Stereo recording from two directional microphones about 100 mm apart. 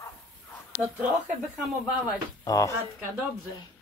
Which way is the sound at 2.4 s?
35° left (ahead or behind).